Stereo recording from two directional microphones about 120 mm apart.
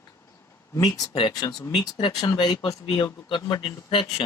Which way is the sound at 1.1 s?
40° left (ahead or behind).